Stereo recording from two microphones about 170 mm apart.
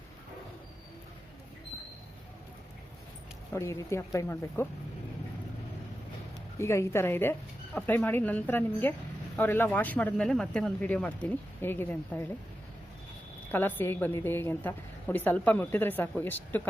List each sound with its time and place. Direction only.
3.5 s a woman's voice: 15° left (ahead or behind)
6.6 s a woman's voice: 15° left (ahead or behind)
13.5 s a woman's voice: 10° left (ahead or behind)